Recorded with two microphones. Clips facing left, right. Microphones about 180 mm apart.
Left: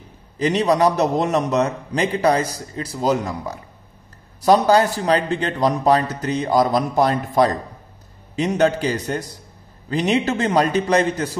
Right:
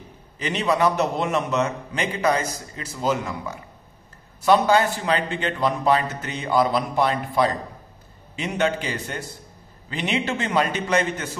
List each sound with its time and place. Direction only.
0.4 s a man's voice: 35° left (ahead or behind)
4.6 s a man's voice: 40° left (ahead or behind)